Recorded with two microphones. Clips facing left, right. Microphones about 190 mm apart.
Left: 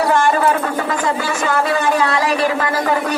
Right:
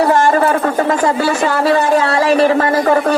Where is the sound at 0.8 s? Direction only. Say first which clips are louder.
Right 6 dB; 40° right (ahead or behind).